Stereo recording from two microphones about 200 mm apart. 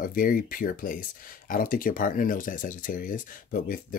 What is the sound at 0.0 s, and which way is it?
Speech, 45° left (ahead or behind).